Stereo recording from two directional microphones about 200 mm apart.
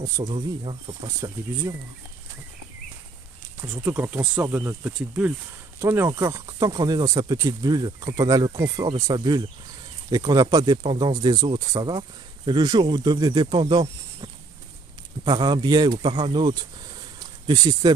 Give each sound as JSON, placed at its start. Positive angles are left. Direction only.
{"t": 0.0, "sound": "speech", "side_deg": -20}
{"t": 3.6, "sound": "speech", "side_deg": -10}